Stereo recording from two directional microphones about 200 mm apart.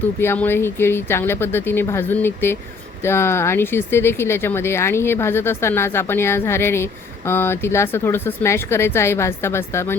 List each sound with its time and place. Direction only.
0.2 s speech: 10° left (ahead or behind)